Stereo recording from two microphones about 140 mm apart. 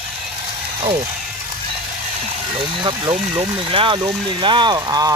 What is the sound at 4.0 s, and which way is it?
Vehicle, 35° right (ahead or behind).